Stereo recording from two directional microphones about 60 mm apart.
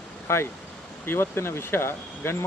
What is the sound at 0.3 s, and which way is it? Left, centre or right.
Speech, left.